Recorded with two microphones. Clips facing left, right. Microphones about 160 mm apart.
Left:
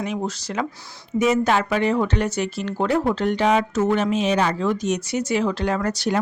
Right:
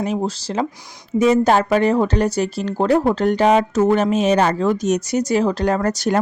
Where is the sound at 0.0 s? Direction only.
35° right (ahead or behind).